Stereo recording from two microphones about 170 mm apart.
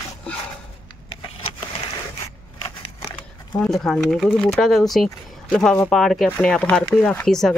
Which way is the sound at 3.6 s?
Centre (ahead or behind).